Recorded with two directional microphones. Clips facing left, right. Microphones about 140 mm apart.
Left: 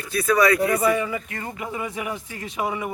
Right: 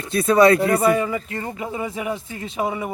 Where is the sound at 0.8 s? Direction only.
45° right (ahead or behind).